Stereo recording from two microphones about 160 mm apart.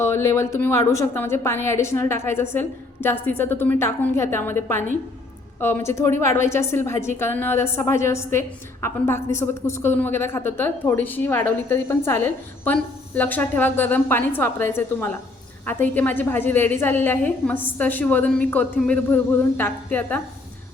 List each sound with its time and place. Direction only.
0.0 s a woman's voice: 15° left (ahead or behind)